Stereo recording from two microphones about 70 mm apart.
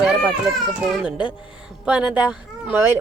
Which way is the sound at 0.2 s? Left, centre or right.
Centre.